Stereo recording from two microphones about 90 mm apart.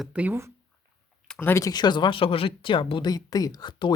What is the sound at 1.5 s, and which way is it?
Speech, 40° left (ahead or behind).